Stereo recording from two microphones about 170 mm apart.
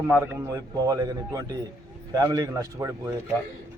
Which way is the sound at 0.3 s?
20° right (ahead or behind).